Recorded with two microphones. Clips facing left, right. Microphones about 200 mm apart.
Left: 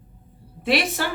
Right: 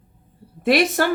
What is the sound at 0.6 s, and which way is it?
Speech, 50° right (ahead or behind).